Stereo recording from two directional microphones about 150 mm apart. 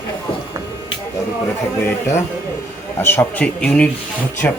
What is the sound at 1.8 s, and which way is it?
Music, 20° left (ahead or behind).